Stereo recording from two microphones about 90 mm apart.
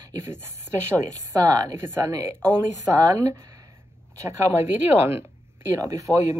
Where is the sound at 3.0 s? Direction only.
40° right (ahead or behind).